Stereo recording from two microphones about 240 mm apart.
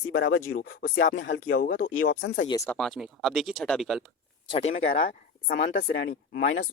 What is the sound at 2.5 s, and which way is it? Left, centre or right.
Speech, centre.